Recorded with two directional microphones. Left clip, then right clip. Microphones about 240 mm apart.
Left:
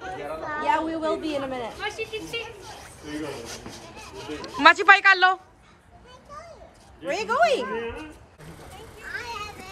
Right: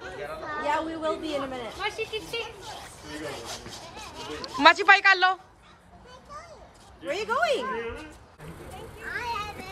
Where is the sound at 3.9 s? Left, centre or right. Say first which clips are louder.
Left 1 dB; centre.